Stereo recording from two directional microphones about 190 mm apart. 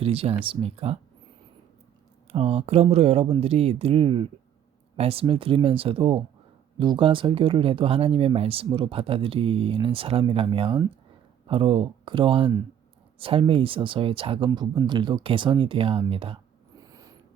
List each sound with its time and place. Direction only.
0.0 s speech: 30° right (ahead or behind)
2.3 s speech: 35° right (ahead or behind)